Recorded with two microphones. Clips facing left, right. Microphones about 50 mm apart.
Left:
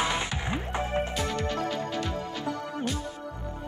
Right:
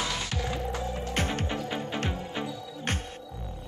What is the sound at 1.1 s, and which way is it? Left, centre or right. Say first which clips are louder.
Music: even; right.